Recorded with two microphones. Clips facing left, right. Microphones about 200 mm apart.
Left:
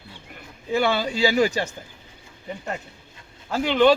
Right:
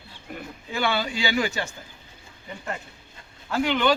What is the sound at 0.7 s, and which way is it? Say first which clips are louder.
Speech: left 4 dB; 40° left (ahead or behind).